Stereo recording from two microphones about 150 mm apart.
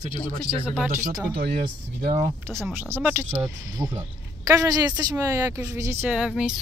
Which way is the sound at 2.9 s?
15° right (ahead or behind).